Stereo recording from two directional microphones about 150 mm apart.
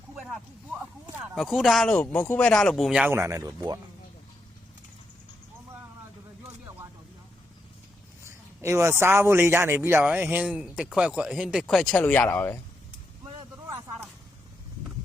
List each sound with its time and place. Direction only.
1.4 s speech: centre (ahead or behind)
2.9 s speech: 10° right (ahead or behind)
8.2 s a man's voice: 20° right (ahead or behind); by 12.5 s 10° left (ahead or behind)